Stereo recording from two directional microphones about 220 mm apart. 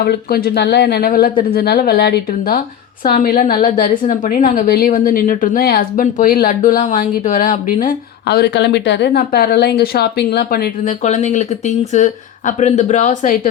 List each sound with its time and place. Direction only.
0.0 s a woman's voice: 45° left (ahead or behind)